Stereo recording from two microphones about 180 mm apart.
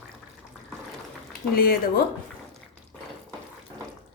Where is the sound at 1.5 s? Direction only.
55° left (ahead or behind).